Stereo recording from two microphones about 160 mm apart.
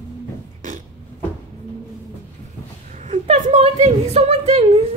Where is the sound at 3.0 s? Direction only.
45° right (ahead or behind).